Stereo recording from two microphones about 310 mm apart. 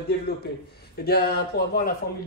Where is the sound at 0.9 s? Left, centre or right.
Left.